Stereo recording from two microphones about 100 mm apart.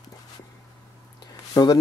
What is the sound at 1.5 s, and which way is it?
Speech, 40° left (ahead or behind).